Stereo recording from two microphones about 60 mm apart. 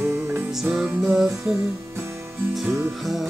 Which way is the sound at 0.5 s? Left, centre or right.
Centre.